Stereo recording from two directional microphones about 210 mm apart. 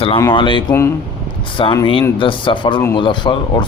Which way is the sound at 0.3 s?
25° left (ahead or behind).